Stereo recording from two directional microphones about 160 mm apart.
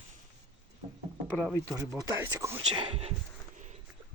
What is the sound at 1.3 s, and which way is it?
Speech, centre (ahead or behind).